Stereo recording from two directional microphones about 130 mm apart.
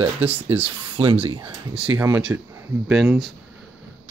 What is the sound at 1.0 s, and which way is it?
Speech, 60° right (ahead or behind).